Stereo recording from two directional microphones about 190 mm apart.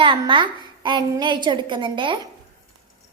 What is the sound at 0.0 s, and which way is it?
Child singing, 25° right (ahead or behind).